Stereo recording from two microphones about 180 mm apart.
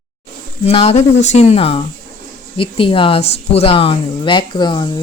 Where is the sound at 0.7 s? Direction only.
35° left (ahead or behind).